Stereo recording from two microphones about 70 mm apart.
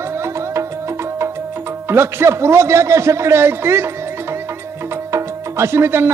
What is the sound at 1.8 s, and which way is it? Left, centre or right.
A man's voice, right.